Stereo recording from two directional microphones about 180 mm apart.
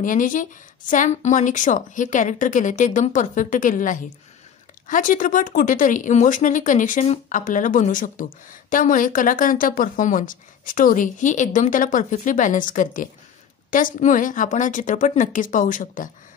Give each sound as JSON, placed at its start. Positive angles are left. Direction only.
{"t": 0.0, "sound": "speech", "side_deg": 45}